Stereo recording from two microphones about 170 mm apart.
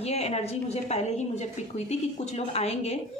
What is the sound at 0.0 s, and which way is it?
A woman's voice, 40° left (ahead or behind).